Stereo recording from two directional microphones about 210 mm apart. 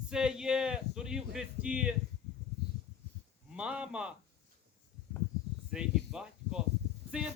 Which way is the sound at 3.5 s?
5° right (ahead or behind).